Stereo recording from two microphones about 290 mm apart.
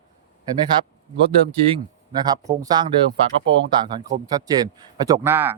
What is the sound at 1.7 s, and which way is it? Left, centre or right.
Speech, centre.